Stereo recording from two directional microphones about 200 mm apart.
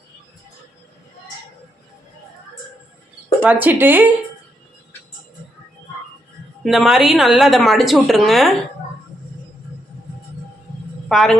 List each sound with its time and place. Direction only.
3.4 s speech: 10° right (ahead or behind)
6.6 s a woman's voice: centre (ahead or behind)
11.1 s a woman's voice: centre (ahead or behind)